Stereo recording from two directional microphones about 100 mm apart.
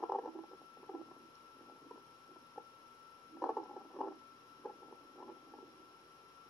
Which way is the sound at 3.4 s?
5° left (ahead or behind).